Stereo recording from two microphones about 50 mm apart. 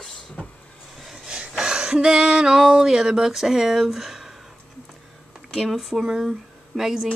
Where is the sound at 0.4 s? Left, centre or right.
Left.